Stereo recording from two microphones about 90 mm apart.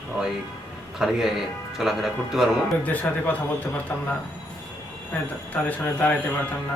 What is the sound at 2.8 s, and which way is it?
Speech, 20° left (ahead or behind).